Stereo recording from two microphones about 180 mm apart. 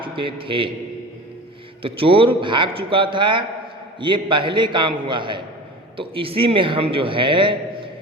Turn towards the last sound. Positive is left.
turn(degrees=-25)  # may be behind; listen again after turning